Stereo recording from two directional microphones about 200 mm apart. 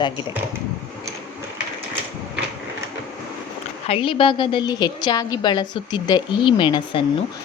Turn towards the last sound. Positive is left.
turn(degrees=20)  # may be behind; listen again after turning